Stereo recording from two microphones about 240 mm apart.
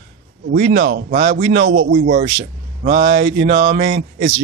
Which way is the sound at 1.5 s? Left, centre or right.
Right.